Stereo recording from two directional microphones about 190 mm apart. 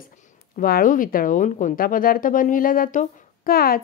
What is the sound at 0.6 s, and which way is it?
A woman's voice, 45° left (ahead or behind).